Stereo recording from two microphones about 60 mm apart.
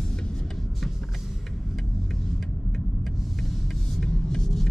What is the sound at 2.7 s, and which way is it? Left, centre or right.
Vehicle, centre.